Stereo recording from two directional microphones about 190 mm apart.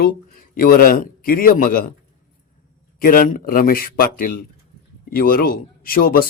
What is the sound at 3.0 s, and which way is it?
A man's voice, 45° left (ahead or behind).